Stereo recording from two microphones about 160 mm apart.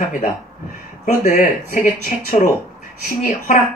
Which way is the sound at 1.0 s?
55° left (ahead or behind).